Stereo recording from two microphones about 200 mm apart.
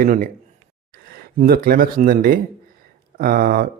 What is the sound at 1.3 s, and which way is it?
Speech, 45° right (ahead or behind).